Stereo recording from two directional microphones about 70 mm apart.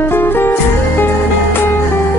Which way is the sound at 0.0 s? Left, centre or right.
Left.